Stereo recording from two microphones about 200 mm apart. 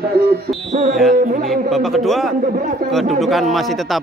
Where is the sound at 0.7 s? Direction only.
35° right (ahead or behind).